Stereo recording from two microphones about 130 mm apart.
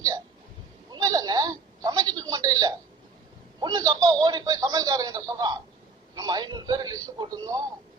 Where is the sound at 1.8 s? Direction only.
30° right (ahead or behind).